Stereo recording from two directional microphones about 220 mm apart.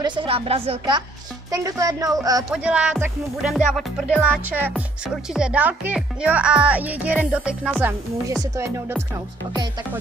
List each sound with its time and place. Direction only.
0.0 s speech: 20° right (ahead or behind)